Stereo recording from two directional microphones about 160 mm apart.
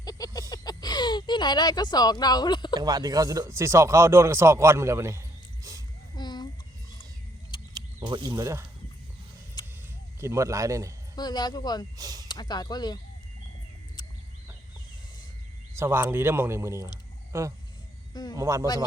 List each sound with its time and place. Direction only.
0.0 s a sound: 25° left (ahead or behind)
2.7 s speech: 25° right (ahead or behind)
6.1 s a sound: 25° left (ahead or behind)
7.5 s a sound: 30° left (ahead or behind)
8.0 s a man's voice: 30° right (ahead or behind)
9.6 s a sound: 25° left (ahead or behind)
10.2 s a man's voice: 20° right (ahead or behind)
11.1 s speech: 25° left (ahead or behind)
11.9 s speech: 20° right (ahead or behind)
12.3 s speech: 25° left (ahead or behind)
15.8 s speech: 15° right (ahead or behind)
18.1 s speech: 25° left (ahead or behind)
18.3 s speech: 20° right (ahead or behind)